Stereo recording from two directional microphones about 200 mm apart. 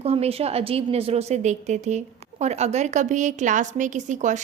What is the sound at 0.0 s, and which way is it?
A woman's voice, 30° right (ahead or behind).